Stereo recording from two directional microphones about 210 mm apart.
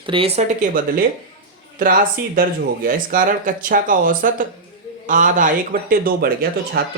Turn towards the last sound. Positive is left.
turn(degrees=-50)  # may be behind; listen again after turning